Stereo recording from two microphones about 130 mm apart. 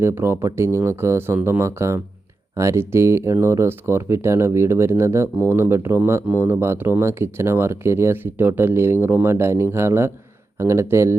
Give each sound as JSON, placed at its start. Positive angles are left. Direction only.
{"t": 0.0, "sound": "speech", "side_deg": -20}